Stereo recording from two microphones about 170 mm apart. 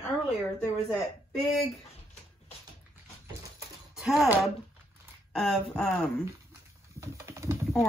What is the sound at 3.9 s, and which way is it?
Speech, centre (ahead or behind).